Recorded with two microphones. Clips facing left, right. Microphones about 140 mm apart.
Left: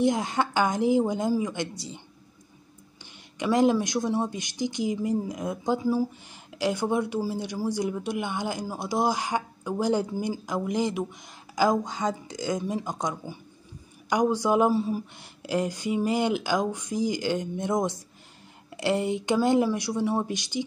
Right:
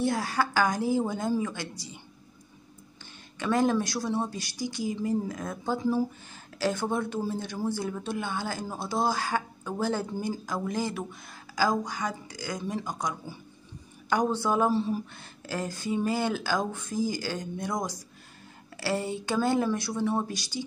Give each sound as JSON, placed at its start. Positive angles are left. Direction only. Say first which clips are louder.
{"t": 0.0, "sound": "speech", "louder": "left 3 dB", "side_deg": 20}
{"t": 3.3, "sound": "a woman's voice", "louder": "left 3 dB", "side_deg": 15}